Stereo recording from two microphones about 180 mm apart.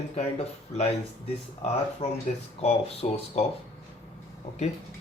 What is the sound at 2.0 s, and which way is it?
Speech, 40° left (ahead or behind).